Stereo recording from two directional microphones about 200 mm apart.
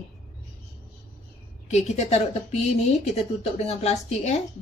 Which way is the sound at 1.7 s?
35° left (ahead or behind).